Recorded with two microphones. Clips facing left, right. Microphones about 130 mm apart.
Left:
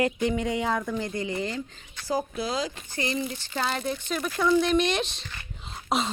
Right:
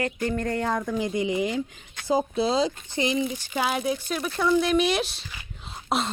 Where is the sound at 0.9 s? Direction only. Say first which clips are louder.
Right 4 dB; 15° right (ahead or behind).